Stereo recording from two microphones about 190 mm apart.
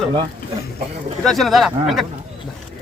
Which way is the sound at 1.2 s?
Centre (ahead or behind).